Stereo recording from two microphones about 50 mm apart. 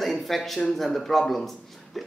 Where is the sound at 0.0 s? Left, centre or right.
Centre.